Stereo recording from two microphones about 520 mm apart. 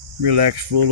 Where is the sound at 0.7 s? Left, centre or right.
Right.